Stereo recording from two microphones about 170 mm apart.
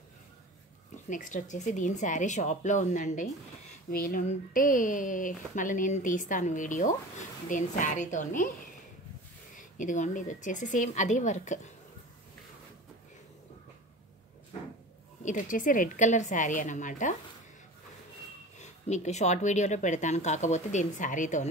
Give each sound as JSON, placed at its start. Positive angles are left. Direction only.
{"t": 1.0, "sound": "speech", "side_deg": 50}
{"t": 9.6, "sound": "speech", "side_deg": 50}
{"t": 15.2, "sound": "speech", "side_deg": 50}
{"t": 18.6, "sound": "speech", "side_deg": 40}